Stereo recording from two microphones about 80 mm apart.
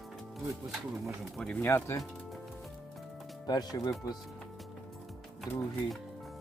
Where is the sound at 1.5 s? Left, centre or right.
Left.